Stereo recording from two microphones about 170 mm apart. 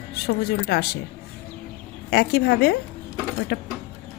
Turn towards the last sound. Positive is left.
turn(degrees=70)  # may be behind; listen again after turning